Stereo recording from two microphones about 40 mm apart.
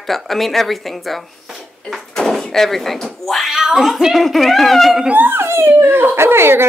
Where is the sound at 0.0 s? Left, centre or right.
Centre.